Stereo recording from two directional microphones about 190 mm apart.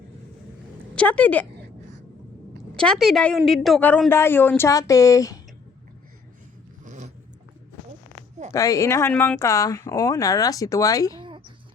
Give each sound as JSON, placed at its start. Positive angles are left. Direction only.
{"t": 0.9, "sound": "speech", "side_deg": 10}
{"t": 2.7, "sound": "speech", "side_deg": 5}
{"t": 6.8, "sound": "zipper", "side_deg": -40}
{"t": 8.5, "sound": "speech", "side_deg": 15}
{"t": 11.2, "sound": "a sound", "side_deg": -25}